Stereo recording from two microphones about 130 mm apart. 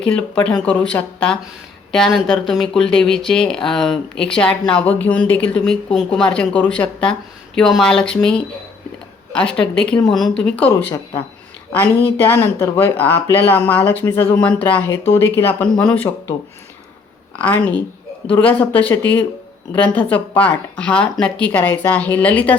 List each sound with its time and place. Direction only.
0.0 s speech: 5° left (ahead or behind)
12.0 s speech: 15° left (ahead or behind)
15.8 s speech: 10° left (ahead or behind)
17.3 s speech: 10° left (ahead or behind)